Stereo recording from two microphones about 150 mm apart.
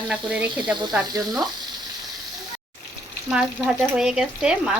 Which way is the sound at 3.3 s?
5° right (ahead or behind).